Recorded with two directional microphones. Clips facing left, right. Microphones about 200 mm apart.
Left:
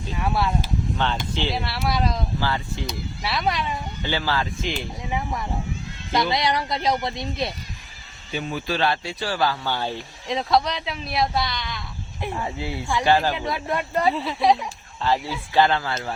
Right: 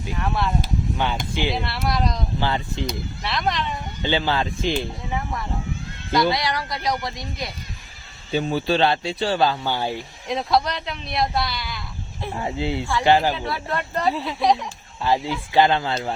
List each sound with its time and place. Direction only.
0.1 s speech: 10° left (ahead or behind)
0.9 s speech: 10° right (ahead or behind)
1.5 s a man's voice: centre (ahead or behind)
2.4 s speech: 20° right (ahead or behind)
3.2 s speech: 5° left (ahead or behind)
4.0 s speech: 20° right (ahead or behind)
5.1 s speech: 10° left (ahead or behind)
8.3 s speech: 30° right (ahead or behind); by 10.0 s 15° right (ahead or behind)
10.2 s a man's voice: centre (ahead or behind)
12.4 s speech: 20° right (ahead or behind)
13.3 s speech: 15° left (ahead or behind)
15.0 s speech: 15° right (ahead or behind)